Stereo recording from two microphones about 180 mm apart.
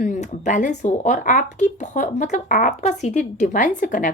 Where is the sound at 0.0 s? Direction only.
40° left (ahead or behind).